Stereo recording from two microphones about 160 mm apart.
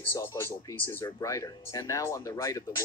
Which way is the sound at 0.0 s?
15° left (ahead or behind).